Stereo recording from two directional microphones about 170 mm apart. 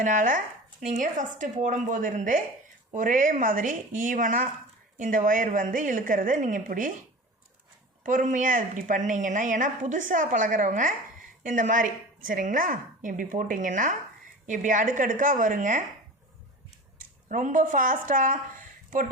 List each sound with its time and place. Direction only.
0.0 s a woman's voice: 50° right (ahead or behind)
8.0 s a woman's voice: 50° right (ahead or behind)
17.0 s a woman's voice: 45° right (ahead or behind)